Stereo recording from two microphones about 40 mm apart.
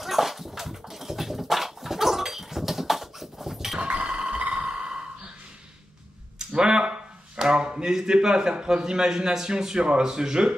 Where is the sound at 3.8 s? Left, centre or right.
Right.